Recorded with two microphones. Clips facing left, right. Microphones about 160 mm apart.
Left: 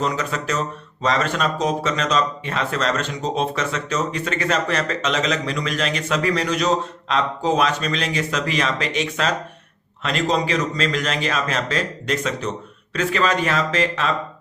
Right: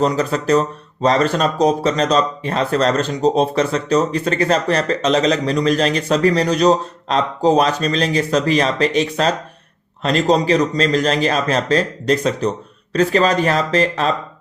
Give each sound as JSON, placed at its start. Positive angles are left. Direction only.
{"t": 0.0, "sound": "speech", "side_deg": -35}